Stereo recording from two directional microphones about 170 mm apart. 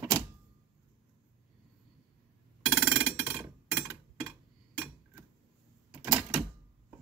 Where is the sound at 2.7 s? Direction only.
15° right (ahead or behind).